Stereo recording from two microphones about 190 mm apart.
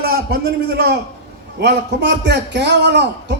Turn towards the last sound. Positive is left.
turn(degrees=-65)  # may be behind; listen again after turning